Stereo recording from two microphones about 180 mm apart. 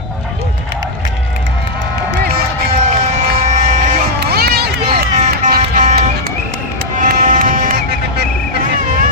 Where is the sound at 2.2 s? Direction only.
55° right (ahead or behind).